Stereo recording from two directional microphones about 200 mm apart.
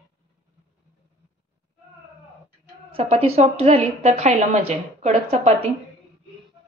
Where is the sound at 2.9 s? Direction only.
30° right (ahead or behind).